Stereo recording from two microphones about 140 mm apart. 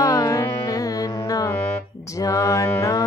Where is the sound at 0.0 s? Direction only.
25° left (ahead or behind).